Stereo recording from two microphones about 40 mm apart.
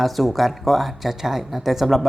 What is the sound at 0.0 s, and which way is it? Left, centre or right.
Speech, centre.